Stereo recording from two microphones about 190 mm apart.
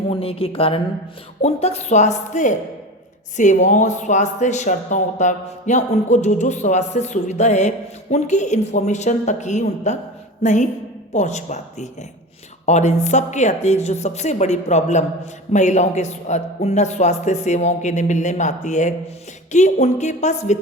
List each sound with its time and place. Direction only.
0.1 s speech: 30° left (ahead or behind)